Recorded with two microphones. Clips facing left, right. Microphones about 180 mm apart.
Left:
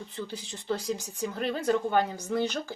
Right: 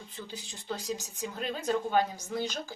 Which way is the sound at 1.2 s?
65° left (ahead or behind).